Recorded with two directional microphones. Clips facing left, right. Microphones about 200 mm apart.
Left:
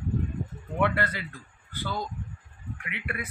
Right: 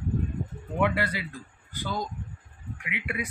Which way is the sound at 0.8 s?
10° right (ahead or behind).